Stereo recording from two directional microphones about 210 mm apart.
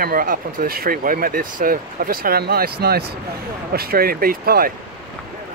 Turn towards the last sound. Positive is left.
turn(degrees=-45)  # may be behind; listen again after turning